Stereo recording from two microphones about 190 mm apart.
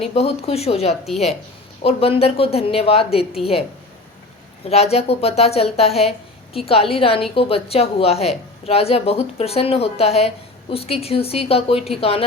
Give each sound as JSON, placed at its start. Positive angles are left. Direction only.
{"t": 0.0, "sound": "a woman's voice", "side_deg": 30}
{"t": 4.6, "sound": "a woman's voice", "side_deg": 35}